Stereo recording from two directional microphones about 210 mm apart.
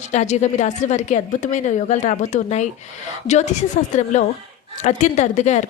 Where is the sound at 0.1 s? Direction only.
35° left (ahead or behind).